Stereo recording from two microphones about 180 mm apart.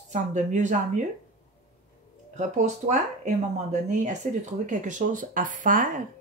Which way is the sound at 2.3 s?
40° right (ahead or behind).